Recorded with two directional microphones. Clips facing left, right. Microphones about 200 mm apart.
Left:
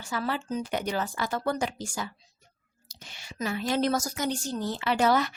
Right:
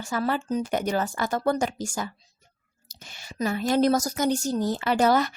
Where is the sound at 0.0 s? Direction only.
45° right (ahead or behind).